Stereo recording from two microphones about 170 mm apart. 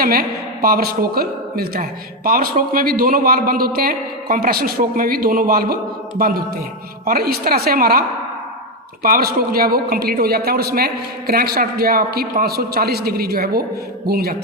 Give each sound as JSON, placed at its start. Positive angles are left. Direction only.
{"t": 0.0, "sound": "a woman's voice", "side_deg": -60}
{"t": 9.0, "sound": "a woman's voice", "side_deg": -60}